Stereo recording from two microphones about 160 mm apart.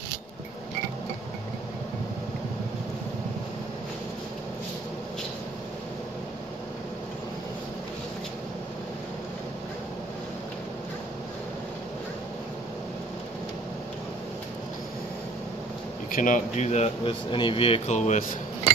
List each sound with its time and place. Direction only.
16.1 s speech: 55° left (ahead or behind)